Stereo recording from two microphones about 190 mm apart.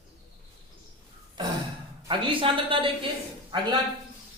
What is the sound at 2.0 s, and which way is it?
A woman's voice, 25° right (ahead or behind).